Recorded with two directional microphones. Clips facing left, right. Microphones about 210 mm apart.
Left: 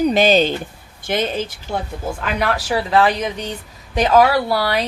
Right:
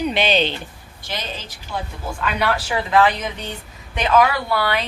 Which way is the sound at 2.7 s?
35° left (ahead or behind).